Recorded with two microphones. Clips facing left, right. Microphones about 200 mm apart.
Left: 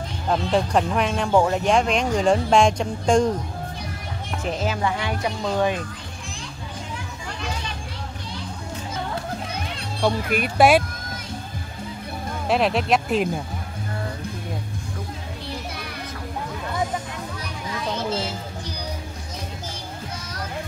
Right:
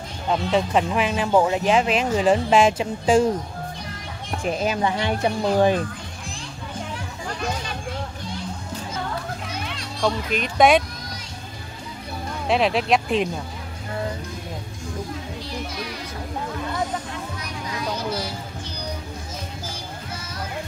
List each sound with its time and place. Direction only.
0.3 s speech: centre (ahead or behind)
4.4 s speech: 15° right (ahead or behind)
4.9 s a woman's voice: 30° right (ahead or behind)
10.3 s speech: 5° left (ahead or behind)
12.4 s speech: centre (ahead or behind)
17.6 s music: 25° left (ahead or behind)